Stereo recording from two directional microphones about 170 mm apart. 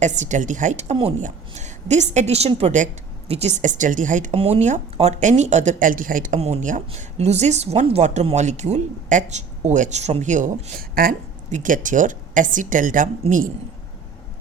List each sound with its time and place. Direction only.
0.0 s speech: 45° right (ahead or behind)
4.4 s speech: 35° right (ahead or behind)